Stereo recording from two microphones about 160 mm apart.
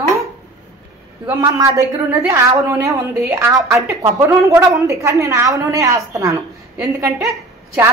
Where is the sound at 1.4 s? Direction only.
20° right (ahead or behind).